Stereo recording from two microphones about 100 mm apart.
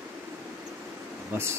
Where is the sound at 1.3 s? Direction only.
25° right (ahead or behind).